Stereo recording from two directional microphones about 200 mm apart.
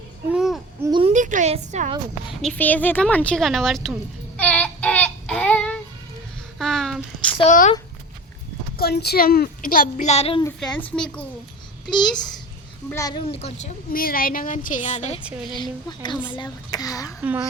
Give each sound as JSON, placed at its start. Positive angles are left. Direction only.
{"t": 0.3, "sound": "babbling", "side_deg": -5}
{"t": 0.9, "sound": "a sound", "side_deg": -25}
{"t": 1.1, "sound": "a woman's voice", "side_deg": -40}
{"t": 2.4, "sound": "speech", "side_deg": 5}
{"t": 4.4, "sound": "child singing", "side_deg": 5}
{"t": 6.6, "sound": "a sound", "side_deg": 0}
{"t": 7.3, "sound": "a woman's voice", "side_deg": 40}
{"t": 8.8, "sound": "a woman's voice", "side_deg": 55}
{"t": 10.6, "sound": "speech", "side_deg": 5}
{"t": 11.9, "sound": "a woman's voice", "side_deg": 20}
{"t": 15.2, "sound": "speech", "side_deg": -5}
{"t": 15.5, "sound": "speech", "side_deg": 20}